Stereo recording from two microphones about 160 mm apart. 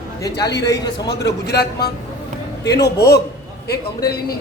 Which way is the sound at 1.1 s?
90° left.